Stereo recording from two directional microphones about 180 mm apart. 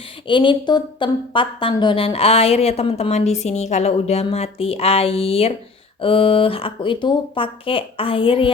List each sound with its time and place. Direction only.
0.3 s a woman's voice: 25° left (ahead or behind)